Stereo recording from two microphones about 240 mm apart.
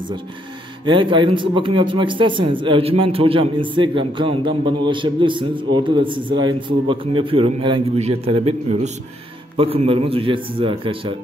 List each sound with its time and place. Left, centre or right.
0.8 s a man's voice: centre